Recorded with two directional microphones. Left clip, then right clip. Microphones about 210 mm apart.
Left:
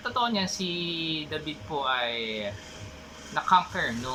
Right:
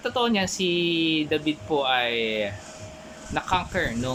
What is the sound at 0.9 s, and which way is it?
Speech, 65° right (ahead or behind).